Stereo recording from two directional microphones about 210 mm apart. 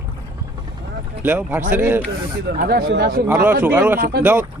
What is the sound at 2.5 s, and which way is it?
Speech, 45° right (ahead or behind).